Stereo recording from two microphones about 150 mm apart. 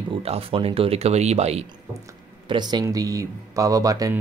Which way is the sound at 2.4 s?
30° right (ahead or behind).